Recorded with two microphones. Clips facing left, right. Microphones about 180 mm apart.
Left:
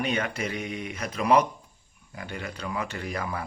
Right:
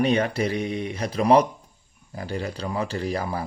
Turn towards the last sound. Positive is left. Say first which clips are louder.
# right 5 dB
turn(degrees=-30)  # may be behind; listen again after turning